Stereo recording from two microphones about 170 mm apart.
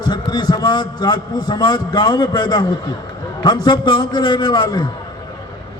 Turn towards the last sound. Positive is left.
turn(degrees=25)  # may be behind; listen again after turning